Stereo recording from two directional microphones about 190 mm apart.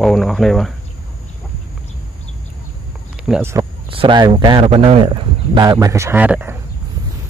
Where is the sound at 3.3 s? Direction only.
10° right (ahead or behind).